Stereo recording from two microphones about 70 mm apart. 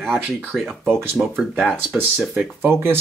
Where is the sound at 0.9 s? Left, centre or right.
Right.